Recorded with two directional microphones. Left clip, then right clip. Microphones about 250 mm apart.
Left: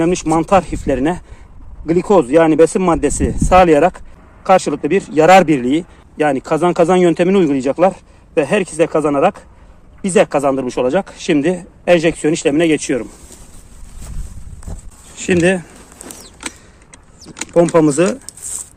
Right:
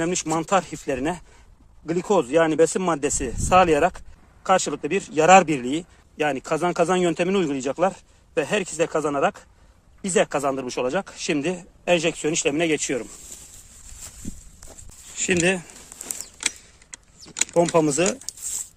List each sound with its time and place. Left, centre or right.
0.0 s speech: centre
14.7 s a sound: centre
17.7 s speech: centre